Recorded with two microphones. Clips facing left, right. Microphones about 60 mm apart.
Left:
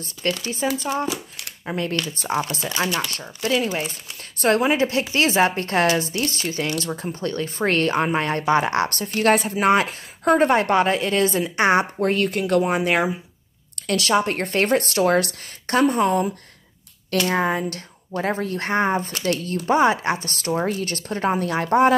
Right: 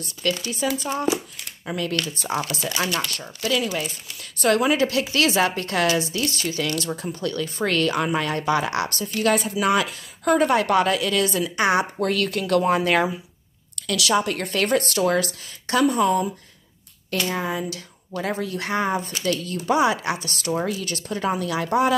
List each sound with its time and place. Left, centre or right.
0.4 s a woman's voice: left
1.7 s a woman's voice: left
13.7 s a woman's voice: left
17.1 s a woman's voice: left